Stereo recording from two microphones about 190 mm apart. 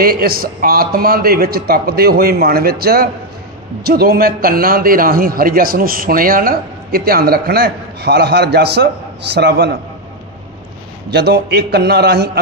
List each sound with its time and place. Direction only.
0.0 s a man's voice: 50° right (ahead or behind)
11.1 s a man's voice: 60° right (ahead or behind)